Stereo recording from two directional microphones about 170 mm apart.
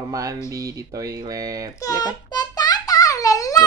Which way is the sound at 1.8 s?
20° left (ahead or behind).